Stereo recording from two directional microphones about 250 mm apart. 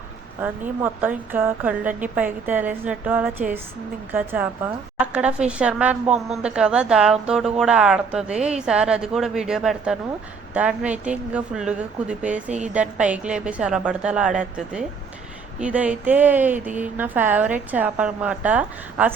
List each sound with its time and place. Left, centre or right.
0.4 s speech: centre
4.9 s a sound: centre
5.5 s a woman's voice: centre
12.5 s a woman's voice: right
12.7 s a woman's voice: centre